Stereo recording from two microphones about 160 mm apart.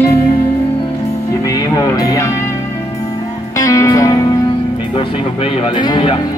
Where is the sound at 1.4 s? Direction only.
25° left (ahead or behind).